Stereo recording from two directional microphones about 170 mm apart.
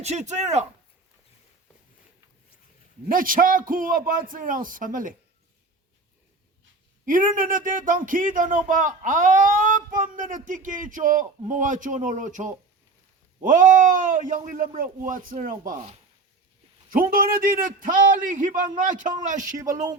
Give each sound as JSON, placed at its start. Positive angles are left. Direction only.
{"t": 0.0, "sound": "speech", "side_deg": -40}
{"t": 3.1, "sound": "a man's voice", "side_deg": -55}
{"t": 7.0, "sound": "speech", "side_deg": -55}
{"t": 16.9, "sound": "speech", "side_deg": -55}
{"t": 19.5, "sound": "speech", "side_deg": -20}